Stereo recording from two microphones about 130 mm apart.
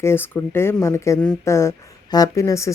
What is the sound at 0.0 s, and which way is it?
Speech, 15° left (ahead or behind).